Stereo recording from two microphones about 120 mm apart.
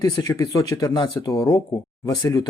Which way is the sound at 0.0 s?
30° left (ahead or behind).